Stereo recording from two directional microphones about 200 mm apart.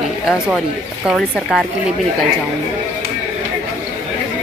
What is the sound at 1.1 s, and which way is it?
Speech, centre (ahead or behind).